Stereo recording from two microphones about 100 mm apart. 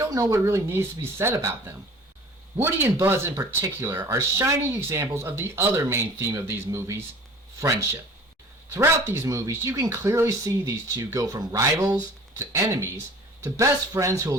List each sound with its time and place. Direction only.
0.0 s speech: 30° right (ahead or behind)
8.7 s speech: 25° right (ahead or behind)